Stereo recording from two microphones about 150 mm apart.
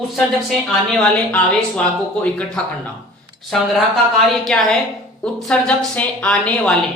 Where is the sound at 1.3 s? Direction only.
10° left (ahead or behind).